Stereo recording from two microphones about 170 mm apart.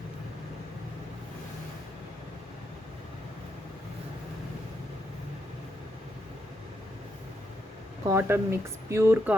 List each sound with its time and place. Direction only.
8.0 s speech: 15° right (ahead or behind)